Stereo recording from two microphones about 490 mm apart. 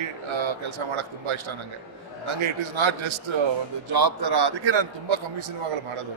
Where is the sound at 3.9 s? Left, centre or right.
Right.